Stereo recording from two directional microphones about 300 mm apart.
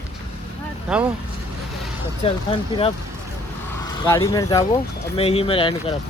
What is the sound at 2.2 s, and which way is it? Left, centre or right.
Speech, centre.